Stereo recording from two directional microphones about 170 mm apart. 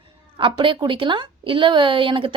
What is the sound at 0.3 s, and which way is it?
A woman's voice, 30° right (ahead or behind).